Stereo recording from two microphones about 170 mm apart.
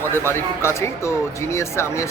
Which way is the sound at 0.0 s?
15° left (ahead or behind).